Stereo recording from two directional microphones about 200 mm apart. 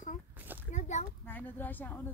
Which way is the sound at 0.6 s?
35° left (ahead or behind).